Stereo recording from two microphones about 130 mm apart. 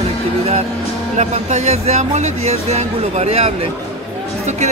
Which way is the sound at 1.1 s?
60° right (ahead or behind).